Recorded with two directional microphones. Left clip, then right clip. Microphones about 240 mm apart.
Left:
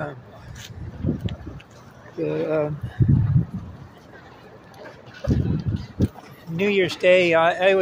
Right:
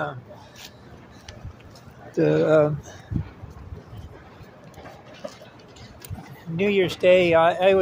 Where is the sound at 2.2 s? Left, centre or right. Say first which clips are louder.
Right 5 dB; centre.